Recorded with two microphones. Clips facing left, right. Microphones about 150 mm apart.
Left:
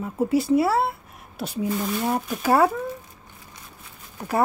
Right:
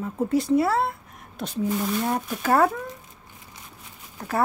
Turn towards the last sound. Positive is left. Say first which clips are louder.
# left 2 dB
turn(degrees=10)  # may be behind; listen again after turning